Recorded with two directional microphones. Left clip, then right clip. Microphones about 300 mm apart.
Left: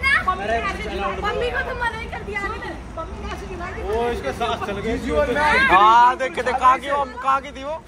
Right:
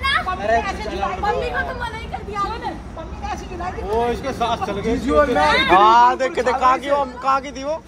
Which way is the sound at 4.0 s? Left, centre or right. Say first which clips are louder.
Right 3 dB; right.